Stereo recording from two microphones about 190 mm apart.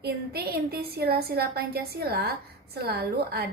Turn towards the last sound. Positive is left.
turn(degrees=-55)  # may be behind; listen again after turning